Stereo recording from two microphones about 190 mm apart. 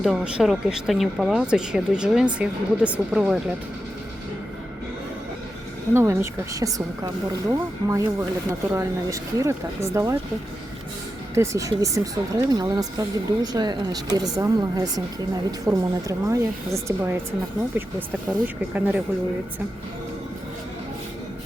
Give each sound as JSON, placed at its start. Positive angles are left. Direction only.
{"t": 0.0, "sound": "speech", "side_deg": -5}
{"t": 5.9, "sound": "speech", "side_deg": -15}
{"t": 11.3, "sound": "speech", "side_deg": -15}
{"t": 18.4, "sound": "speech", "side_deg": -10}